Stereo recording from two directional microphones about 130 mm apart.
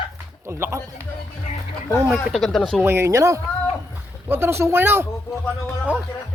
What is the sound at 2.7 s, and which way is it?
Speech, 20° right (ahead or behind).